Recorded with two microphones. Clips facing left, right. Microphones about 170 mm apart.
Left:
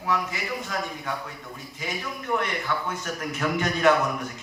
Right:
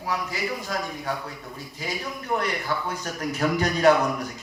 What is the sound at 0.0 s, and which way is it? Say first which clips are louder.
A man's voice: left 1 dB; 35° right (ahead or behind).